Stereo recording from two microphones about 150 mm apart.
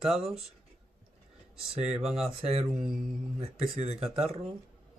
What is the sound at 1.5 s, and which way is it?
Speech, centre (ahead or behind).